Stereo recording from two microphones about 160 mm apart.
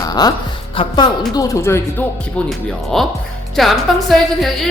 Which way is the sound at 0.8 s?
30° left (ahead or behind).